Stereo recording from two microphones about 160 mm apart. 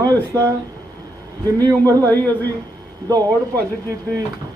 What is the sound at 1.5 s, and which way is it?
Speech, 10° left (ahead or behind).